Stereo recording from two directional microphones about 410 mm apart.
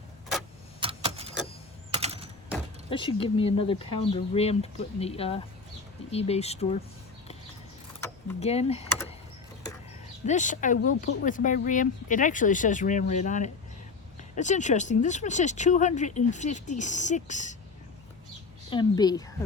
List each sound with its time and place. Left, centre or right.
0.8 s keys jangling: centre
1.9 s a sound: centre
2.9 s speech: centre
8.0 s a sound: centre
10.2 s speech: centre
18.7 s speech: centre